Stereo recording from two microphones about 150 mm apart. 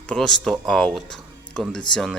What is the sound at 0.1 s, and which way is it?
A man's voice, centre (ahead or behind).